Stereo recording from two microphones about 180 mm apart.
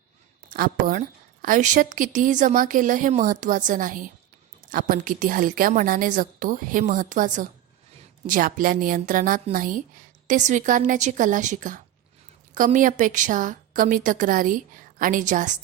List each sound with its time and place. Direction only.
0.5 s a woman's voice: 50° right (ahead or behind)